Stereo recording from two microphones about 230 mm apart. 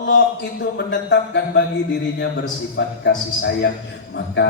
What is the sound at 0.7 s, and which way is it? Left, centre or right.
Speech, left.